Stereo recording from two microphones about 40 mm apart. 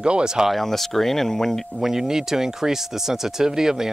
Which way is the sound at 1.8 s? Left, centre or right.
Centre.